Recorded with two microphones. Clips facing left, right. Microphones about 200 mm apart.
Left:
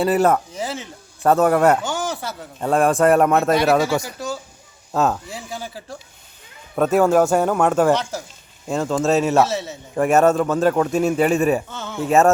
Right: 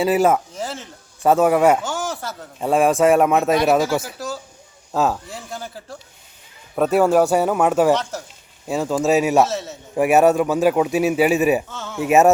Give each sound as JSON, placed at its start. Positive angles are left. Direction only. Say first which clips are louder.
{"t": 0.0, "sound": "a man's voice", "louder": "even", "side_deg": 0}
{"t": 9.1, "sound": "a man's voice", "louder": "right 1 dB", "side_deg": -15}
{"t": 9.4, "sound": "a man's voice", "louder": "even", "side_deg": 0}
{"t": 12.0, "sound": "a man's voice", "louder": "right 1 dB", "side_deg": -15}